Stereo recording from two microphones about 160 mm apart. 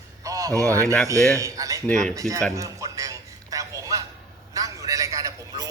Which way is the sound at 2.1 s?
20° right (ahead or behind).